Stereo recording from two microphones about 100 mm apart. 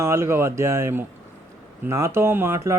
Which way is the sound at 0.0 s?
30° right (ahead or behind).